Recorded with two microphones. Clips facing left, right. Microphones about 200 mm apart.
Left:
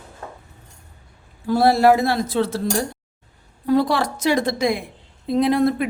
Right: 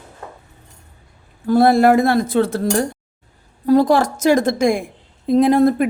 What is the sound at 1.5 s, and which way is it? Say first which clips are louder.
A woman's voice: right 3 dB; 50° right (ahead or behind).